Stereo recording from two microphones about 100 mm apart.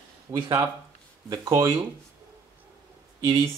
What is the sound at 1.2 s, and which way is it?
Speech, 35° right (ahead or behind).